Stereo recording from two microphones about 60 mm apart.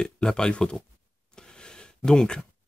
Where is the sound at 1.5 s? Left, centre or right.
Centre.